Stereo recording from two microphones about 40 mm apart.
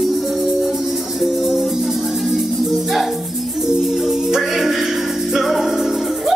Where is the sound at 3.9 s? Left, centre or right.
Centre.